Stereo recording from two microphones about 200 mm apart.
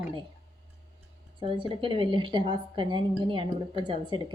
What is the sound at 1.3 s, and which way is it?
A woman's voice, 25° right (ahead or behind).